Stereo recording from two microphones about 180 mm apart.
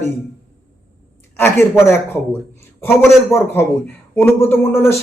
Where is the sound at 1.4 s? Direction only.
15° left (ahead or behind).